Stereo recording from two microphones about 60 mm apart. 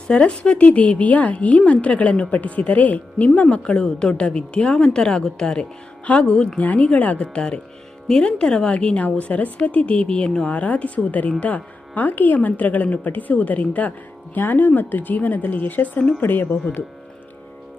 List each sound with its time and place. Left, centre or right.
0.1 s a woman's voice: centre
6.7 s speech: left
8.0 s speech: centre; by 16.2 s left
16.2 s speech: left